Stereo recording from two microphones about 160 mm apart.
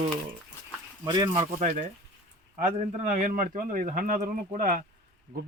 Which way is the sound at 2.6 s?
50° right (ahead or behind).